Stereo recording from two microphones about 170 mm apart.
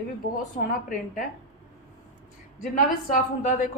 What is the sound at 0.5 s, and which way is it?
Speech, 45° left (ahead or behind).